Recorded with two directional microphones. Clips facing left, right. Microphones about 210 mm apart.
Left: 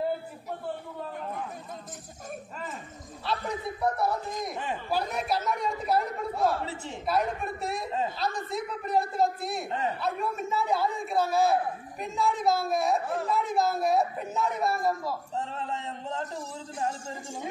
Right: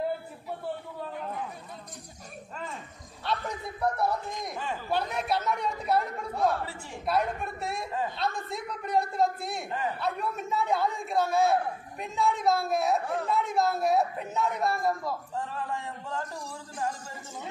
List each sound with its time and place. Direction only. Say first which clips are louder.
3.3 s a man's voice: left 1 dB; centre (ahead or behind)
6.6 s a woman's voice: left 3 dB; 20° left (ahead or behind)
7.1 s a man's voice: even; centre (ahead or behind)
15.3 s a sound: even; 25° left (ahead or behind)